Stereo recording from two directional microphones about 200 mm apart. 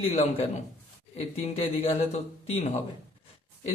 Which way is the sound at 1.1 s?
30° left (ahead or behind).